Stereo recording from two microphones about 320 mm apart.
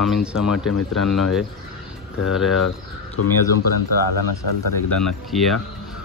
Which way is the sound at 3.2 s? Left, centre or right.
Left.